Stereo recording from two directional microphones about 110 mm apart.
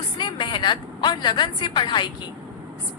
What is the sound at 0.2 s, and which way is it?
A woman's voice, 45° left (ahead or behind).